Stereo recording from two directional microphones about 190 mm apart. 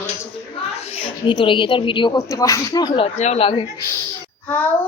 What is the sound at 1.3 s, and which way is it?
Speech, 25° left (ahead or behind).